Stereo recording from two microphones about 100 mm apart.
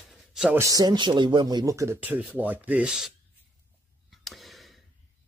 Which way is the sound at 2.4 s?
15° right (ahead or behind).